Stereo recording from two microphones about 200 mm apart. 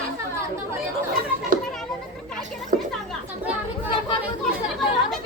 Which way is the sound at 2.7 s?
40° right (ahead or behind).